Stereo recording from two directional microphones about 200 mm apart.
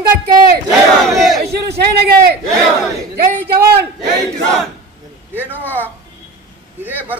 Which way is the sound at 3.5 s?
50° right (ahead or behind).